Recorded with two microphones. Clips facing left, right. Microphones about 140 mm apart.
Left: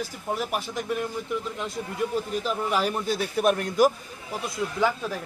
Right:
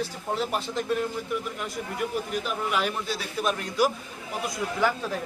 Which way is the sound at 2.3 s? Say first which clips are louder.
Left 2 dB; 35° left (ahead or behind).